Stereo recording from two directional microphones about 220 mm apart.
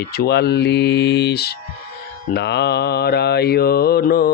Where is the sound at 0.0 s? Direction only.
45° left (ahead or behind).